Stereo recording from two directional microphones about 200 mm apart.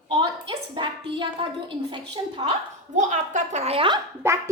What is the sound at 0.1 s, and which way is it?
A woman's voice, 25° right (ahead or behind).